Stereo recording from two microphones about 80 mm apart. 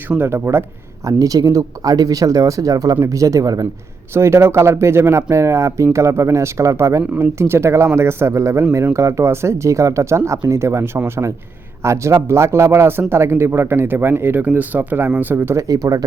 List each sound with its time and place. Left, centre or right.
0.2 s speech: right
1.0 s speech: right
4.1 s speech: right
15.6 s speech: right